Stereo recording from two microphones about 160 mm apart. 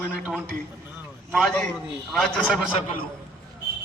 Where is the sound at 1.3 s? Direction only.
5° left (ahead or behind).